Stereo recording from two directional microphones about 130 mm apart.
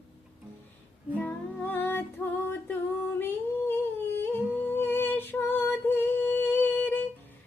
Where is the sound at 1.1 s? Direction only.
15° left (ahead or behind).